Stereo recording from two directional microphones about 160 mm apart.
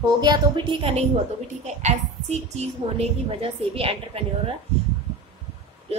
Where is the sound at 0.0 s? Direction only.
25° right (ahead or behind).